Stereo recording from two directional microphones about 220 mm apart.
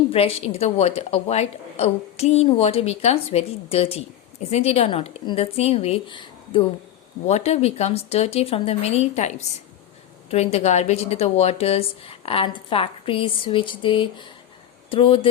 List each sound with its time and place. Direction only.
0.1 s a woman's voice: 25° left (ahead or behind)